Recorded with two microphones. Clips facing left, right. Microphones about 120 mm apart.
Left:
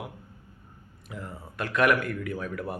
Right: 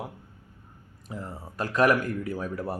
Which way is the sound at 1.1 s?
35° right (ahead or behind).